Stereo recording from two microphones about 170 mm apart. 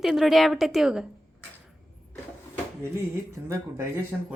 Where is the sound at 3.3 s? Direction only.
15° right (ahead or behind).